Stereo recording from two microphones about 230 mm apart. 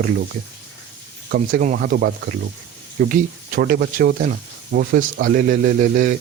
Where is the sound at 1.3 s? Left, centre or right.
Right.